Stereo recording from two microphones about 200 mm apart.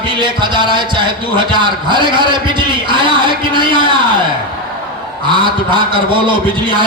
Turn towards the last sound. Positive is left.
turn(degrees=-25)  # may be behind; listen again after turning